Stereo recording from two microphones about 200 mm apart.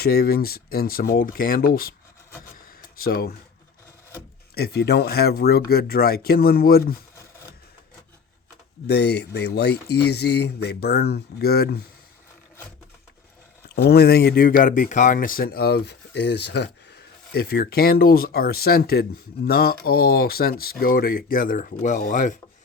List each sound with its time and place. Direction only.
0.0 s speech: 50° left (ahead or behind)
2.6 s a sound: 45° left (ahead or behind)
4.5 s speech: 50° left (ahead or behind)
8.9 s speech: 55° left (ahead or behind)
13.8 s speech: 55° left (ahead or behind)